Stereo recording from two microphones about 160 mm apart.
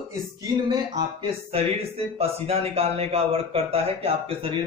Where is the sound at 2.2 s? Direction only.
40° right (ahead or behind).